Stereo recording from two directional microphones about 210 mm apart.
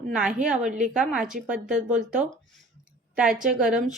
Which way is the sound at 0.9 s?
5° right (ahead or behind).